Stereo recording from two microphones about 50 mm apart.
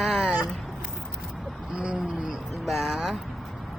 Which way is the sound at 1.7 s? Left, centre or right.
Right.